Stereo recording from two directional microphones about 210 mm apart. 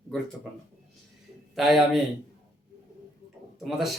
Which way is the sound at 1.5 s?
Centre (ahead or behind).